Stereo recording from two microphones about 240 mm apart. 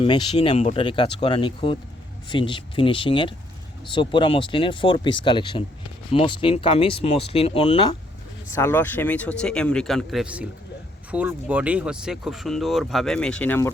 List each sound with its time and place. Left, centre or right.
0.0 s speech: left
8.5 s speech: centre